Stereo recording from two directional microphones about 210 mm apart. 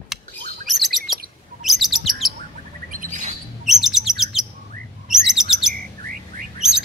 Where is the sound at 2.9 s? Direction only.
40° right (ahead or behind).